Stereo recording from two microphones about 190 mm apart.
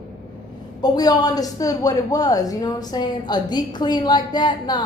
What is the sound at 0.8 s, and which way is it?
A woman's voice, 20° left (ahead or behind).